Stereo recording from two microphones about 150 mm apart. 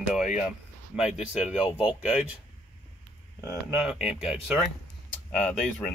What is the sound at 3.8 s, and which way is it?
Speech, 5° right (ahead or behind).